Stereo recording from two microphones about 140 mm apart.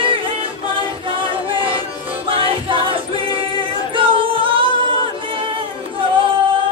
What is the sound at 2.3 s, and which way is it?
Choir, 40° right (ahead or behind).